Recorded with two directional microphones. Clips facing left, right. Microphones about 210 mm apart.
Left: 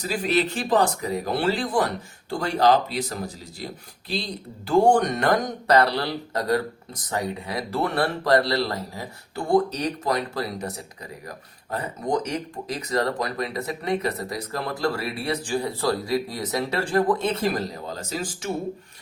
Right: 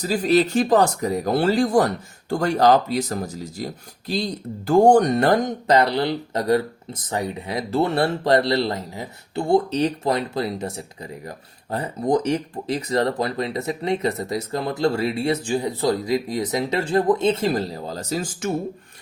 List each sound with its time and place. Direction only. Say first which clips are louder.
0.0 s speech: right 5 dB; 40° right (ahead or behind)